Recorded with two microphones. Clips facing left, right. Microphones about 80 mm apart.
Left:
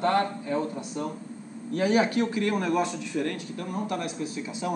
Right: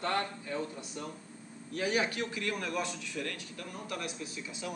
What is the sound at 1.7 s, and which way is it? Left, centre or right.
A man's voice, left.